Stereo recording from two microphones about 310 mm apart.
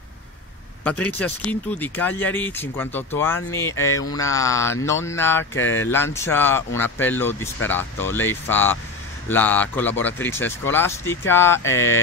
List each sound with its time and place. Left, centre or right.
0.8 s speech: centre
5.6 s speech: left
5.9 s speech: centre